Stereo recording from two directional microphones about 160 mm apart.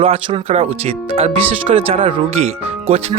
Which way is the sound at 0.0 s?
35° right (ahead or behind).